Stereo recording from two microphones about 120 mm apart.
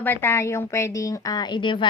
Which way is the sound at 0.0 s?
20° left (ahead or behind).